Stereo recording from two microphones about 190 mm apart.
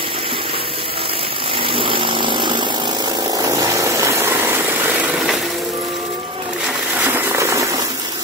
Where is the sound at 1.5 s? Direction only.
25° right (ahead or behind).